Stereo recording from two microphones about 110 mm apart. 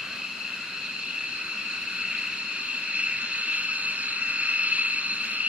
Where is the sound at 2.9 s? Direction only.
10° right (ahead or behind).